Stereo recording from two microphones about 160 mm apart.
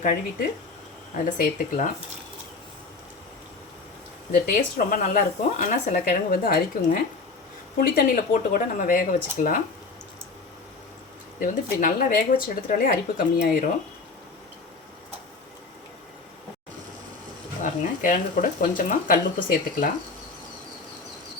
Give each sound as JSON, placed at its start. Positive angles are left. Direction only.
{"t": 0.0, "sound": "speech", "side_deg": 60}
{"t": 4.8, "sound": "speech", "side_deg": 55}
{"t": 11.3, "sound": "speech", "side_deg": 55}
{"t": 17.6, "sound": "speech", "side_deg": 50}